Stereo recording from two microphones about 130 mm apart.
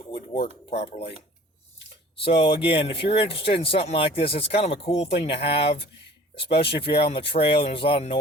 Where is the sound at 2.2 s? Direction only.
45° left (ahead or behind).